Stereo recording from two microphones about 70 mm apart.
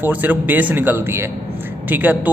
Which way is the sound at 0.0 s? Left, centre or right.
Right.